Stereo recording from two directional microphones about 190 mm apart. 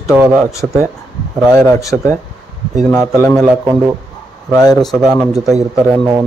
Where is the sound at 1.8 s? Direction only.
15° left (ahead or behind).